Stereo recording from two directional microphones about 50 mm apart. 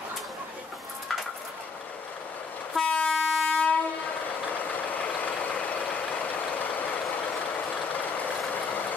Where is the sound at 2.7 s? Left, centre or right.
Centre.